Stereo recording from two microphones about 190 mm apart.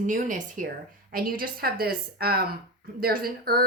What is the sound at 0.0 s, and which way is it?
A woman's voice, 40° right (ahead or behind).